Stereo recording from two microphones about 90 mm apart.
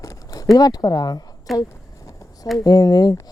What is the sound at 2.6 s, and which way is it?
Speech, 45° left (ahead or behind).